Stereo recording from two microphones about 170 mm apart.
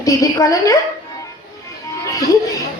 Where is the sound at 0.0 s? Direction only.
20° left (ahead or behind).